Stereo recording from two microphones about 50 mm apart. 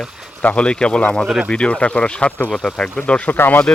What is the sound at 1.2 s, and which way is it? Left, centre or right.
Speech, centre.